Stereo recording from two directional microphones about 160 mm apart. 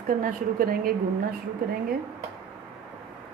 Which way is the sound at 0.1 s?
60° right (ahead or behind).